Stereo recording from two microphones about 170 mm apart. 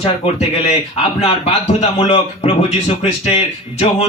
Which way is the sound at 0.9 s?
35° left (ahead or behind).